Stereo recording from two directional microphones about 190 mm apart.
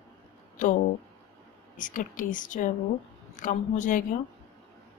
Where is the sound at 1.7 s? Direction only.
45° left (ahead or behind).